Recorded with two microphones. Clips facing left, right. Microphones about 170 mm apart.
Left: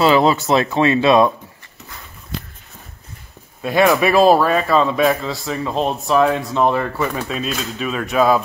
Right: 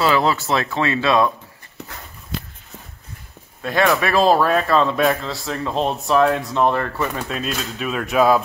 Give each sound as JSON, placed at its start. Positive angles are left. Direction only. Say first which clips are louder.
{"t": 0.0, "sound": "speech", "louder": "left 4 dB", "side_deg": 20}
{"t": 1.8, "sound": "horse", "louder": "right 5 dB", "side_deg": -65}
{"t": 3.6, "sound": "speech", "louder": "left 4 dB", "side_deg": 10}